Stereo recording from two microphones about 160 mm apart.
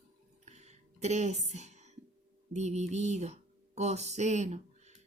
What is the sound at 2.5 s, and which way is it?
Speech, 45° right (ahead or behind).